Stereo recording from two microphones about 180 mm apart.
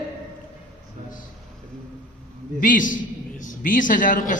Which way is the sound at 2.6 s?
50° left (ahead or behind).